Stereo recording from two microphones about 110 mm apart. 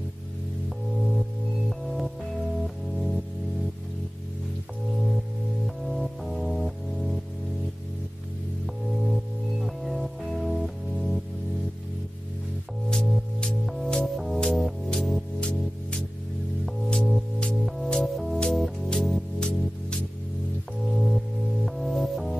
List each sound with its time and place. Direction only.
1.7 s music: centre (ahead or behind)
5.9 s music: centre (ahead or behind)
9.0 s music: centre (ahead or behind)
12.9 s music: 5° left (ahead or behind)